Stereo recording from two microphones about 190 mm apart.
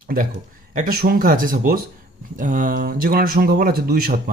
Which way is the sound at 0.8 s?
50° right (ahead or behind).